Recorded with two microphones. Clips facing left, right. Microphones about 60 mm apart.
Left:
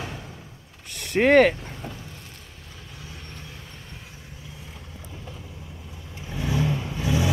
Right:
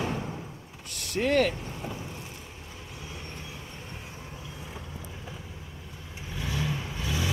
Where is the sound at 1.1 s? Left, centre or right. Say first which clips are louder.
Left 8 dB; left.